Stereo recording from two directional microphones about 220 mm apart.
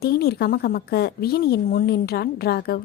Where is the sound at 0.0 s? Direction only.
45° left (ahead or behind).